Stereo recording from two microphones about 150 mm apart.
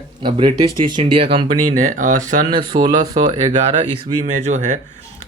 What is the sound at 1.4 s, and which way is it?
Speech, 60° right (ahead or behind).